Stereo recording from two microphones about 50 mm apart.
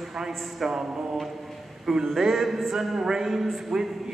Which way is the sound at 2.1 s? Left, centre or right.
Centre.